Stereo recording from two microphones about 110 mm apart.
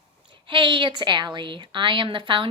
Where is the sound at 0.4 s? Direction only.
50° right (ahead or behind).